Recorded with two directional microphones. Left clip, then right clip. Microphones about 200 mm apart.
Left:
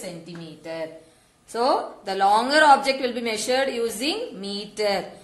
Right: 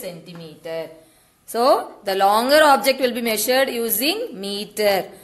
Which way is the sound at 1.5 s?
50° right (ahead or behind).